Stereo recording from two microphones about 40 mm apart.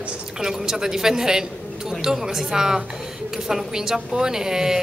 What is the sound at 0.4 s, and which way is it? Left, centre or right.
A woman's voice, centre.